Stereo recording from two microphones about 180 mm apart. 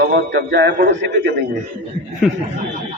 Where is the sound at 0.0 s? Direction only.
65° right (ahead or behind).